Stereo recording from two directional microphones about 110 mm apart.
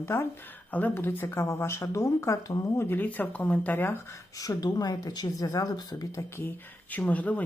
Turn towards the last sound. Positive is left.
turn(degrees=15)  # may be behind; listen again after turning